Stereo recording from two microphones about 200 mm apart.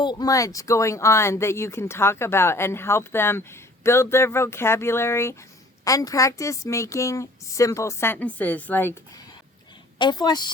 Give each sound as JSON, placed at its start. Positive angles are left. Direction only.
{"t": 0.0, "sound": "speech", "side_deg": 20}
{"t": 10.0, "sound": "a woman's voice", "side_deg": 20}